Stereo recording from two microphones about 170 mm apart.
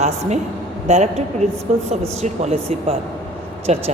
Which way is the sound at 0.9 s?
40° right (ahead or behind).